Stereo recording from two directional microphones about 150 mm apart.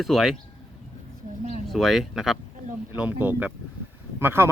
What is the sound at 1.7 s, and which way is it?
Speech, centre (ahead or behind).